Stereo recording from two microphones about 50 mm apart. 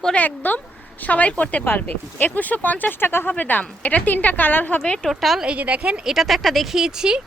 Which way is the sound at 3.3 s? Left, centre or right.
Left.